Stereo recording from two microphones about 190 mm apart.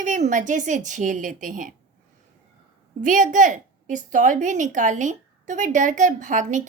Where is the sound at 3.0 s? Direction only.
45° right (ahead or behind).